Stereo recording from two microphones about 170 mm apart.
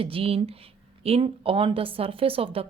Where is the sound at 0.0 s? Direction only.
35° right (ahead or behind).